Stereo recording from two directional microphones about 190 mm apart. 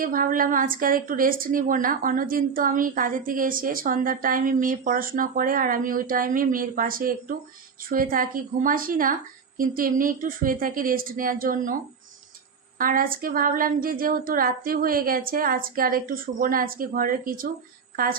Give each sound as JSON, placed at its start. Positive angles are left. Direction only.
{"t": 0.0, "sound": "a woman's voice", "side_deg": -45}
{"t": 12.8, "sound": "a woman's voice", "side_deg": -45}